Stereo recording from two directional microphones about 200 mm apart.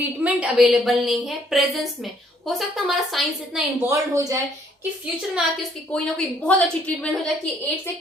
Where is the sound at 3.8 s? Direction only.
15° right (ahead or behind).